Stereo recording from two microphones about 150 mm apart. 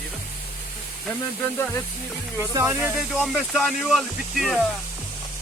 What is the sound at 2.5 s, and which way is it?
Speech, 20° right (ahead or behind).